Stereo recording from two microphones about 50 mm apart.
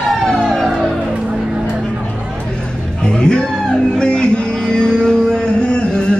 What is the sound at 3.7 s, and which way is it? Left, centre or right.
Music, centre.